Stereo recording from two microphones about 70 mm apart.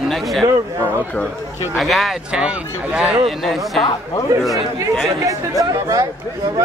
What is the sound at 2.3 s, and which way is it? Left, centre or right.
Speech, centre.